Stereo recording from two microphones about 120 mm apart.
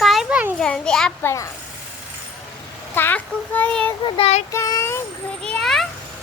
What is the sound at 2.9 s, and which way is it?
Child singing, 15° left (ahead or behind).